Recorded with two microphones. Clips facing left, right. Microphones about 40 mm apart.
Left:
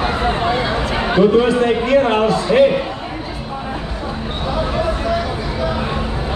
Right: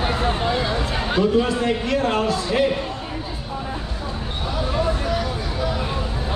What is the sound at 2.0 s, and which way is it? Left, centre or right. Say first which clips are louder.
Speech: left 6 dB; left.